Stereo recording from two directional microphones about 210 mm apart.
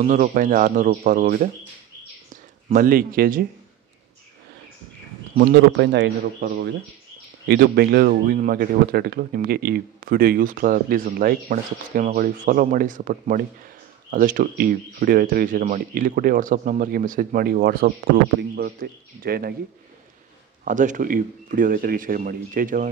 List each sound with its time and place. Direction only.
0.0 s speech: 35° right (ahead or behind)
2.7 s speech: 45° right (ahead or behind)
5.4 s speech: 50° right (ahead or behind)
20.6 s speech: 35° right (ahead or behind)